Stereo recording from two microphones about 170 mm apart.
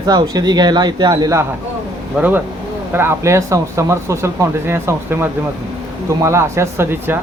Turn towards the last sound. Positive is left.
turn(degrees=-15)  # may be behind; listen again after turning